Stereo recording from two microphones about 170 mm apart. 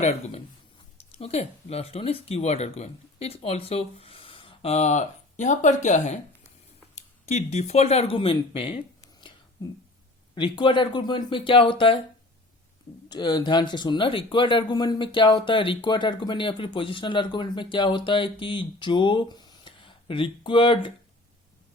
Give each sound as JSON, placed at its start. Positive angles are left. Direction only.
{"t": 0.0, "sound": "speech", "side_deg": 40}
{"t": 10.3, "sound": "speech", "side_deg": 30}
{"t": 13.1, "sound": "speech", "side_deg": 25}